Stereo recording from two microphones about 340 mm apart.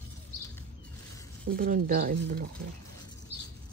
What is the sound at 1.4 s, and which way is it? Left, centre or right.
Speech, right.